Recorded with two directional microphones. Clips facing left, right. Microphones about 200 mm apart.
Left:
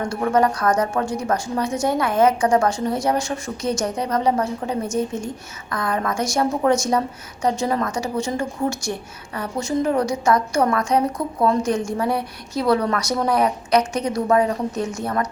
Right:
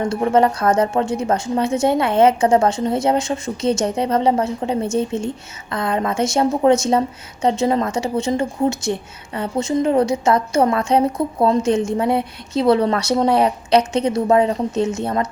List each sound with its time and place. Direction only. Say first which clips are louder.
0.0 s a woman's voice: right 3 dB; 25° right (ahead or behind)